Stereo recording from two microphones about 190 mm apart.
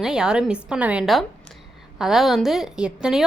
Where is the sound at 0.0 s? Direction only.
5° right (ahead or behind).